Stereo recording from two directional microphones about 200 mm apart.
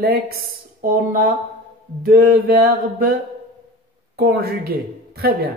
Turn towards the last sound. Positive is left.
turn(degrees=-50)  # may be behind; listen again after turning